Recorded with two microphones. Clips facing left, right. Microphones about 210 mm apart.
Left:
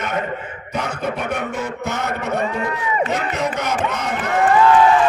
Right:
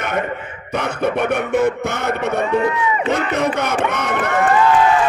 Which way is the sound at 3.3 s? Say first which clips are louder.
Right 3 dB; 60° right (ahead or behind).